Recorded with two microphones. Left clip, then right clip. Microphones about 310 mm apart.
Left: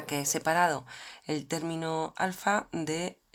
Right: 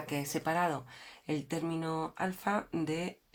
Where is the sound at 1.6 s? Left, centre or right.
Left.